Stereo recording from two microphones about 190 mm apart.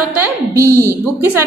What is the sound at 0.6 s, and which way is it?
Speech, 15° left (ahead or behind).